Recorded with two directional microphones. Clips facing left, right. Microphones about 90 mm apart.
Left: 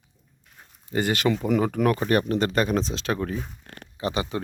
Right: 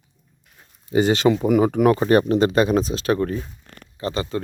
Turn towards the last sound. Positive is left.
turn(degrees=15)  # may be behind; listen again after turning